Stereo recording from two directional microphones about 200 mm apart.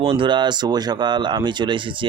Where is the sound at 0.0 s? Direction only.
25° right (ahead or behind).